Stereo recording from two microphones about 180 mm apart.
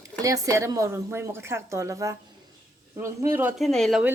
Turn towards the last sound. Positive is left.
turn(degrees=-5)  # may be behind; listen again after turning